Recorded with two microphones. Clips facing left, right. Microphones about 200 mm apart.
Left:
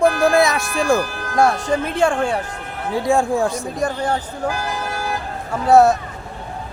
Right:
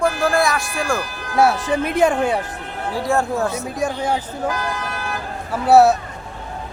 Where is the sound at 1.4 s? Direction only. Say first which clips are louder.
Even; 10° right (ahead or behind).